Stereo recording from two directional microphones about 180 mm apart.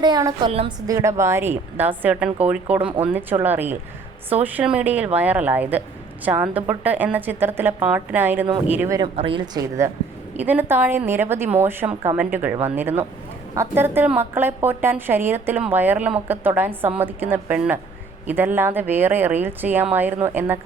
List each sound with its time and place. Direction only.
0.0 s a woman's voice: 20° right (ahead or behind)
9.0 s a woman's voice: 30° right (ahead or behind)
10.3 s a woman's voice: 10° right (ahead or behind)